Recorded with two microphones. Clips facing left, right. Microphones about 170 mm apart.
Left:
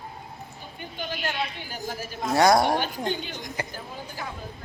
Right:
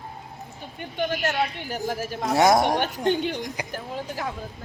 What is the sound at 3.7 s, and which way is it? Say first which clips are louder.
Speech: right 6 dB; 75° right (ahead or behind).